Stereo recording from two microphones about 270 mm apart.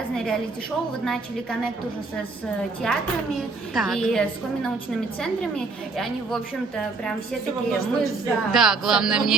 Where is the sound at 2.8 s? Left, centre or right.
Centre.